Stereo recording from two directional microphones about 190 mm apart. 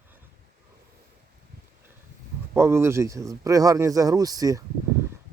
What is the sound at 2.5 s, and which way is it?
Speech, 15° right (ahead or behind).